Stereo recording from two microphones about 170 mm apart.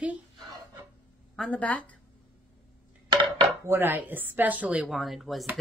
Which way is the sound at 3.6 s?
15° right (ahead or behind).